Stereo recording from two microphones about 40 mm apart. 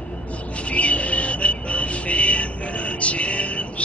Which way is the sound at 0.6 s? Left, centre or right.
Left.